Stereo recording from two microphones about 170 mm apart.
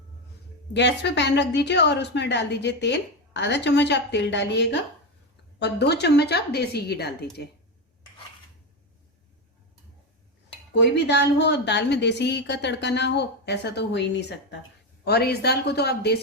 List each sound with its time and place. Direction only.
0.7 s a woman's voice: 90° left
5.5 s a woman's voice: 80° left
10.9 s a woman's voice: 85° left
15.0 s a woman's voice: 70° left (ahead or behind)